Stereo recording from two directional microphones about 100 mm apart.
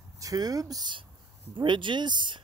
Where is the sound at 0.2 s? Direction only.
35° right (ahead or behind).